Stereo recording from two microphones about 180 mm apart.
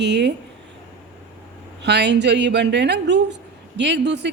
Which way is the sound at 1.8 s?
70° right (ahead or behind).